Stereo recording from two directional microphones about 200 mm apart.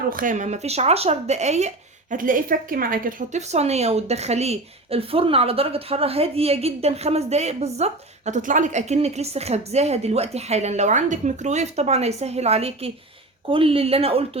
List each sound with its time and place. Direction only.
0.1 s speech: 40° right (ahead or behind)